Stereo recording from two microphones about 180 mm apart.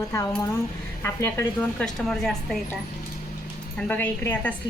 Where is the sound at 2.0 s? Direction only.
Centre (ahead or behind).